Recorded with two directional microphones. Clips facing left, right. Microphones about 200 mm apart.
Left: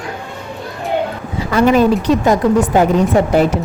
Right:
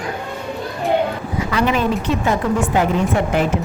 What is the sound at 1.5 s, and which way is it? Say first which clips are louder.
Speech: left 8 dB; 40° left (ahead or behind).